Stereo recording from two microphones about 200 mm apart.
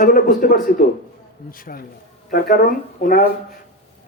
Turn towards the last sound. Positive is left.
turn(degrees=45)  # may be behind; listen again after turning